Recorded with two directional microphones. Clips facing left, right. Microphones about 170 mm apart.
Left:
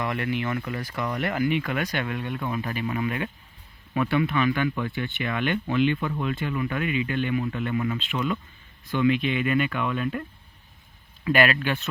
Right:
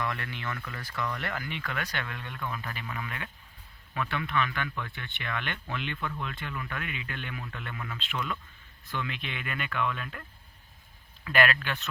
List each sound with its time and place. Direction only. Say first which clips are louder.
0.0 s speech: left 7 dB; 15° left (ahead or behind)